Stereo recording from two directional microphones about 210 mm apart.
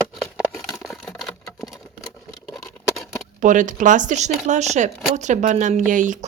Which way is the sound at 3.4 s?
35° right (ahead or behind).